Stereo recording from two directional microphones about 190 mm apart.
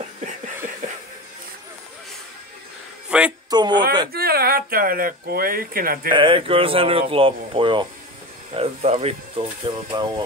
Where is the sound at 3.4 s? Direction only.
20° right (ahead or behind).